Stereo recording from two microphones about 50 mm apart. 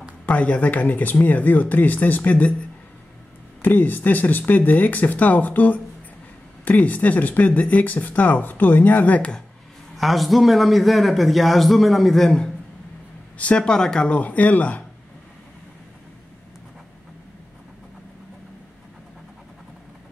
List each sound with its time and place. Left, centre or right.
0.3 s speech: left
3.6 s speech: left
9.9 s a man's voice: centre
13.4 s speech: left
14.1 s speech: left